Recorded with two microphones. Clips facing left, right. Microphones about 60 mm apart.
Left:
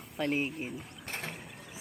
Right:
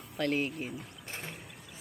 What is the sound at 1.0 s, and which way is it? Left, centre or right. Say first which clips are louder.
Mechanisms: left 4 dB; left.